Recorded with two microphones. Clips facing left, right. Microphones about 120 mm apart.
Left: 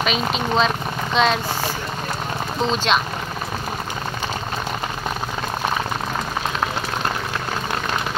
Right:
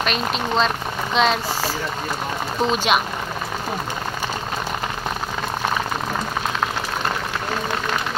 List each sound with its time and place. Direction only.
0.0 s speech: centre (ahead or behind)
2.6 s speech: 5° right (ahead or behind)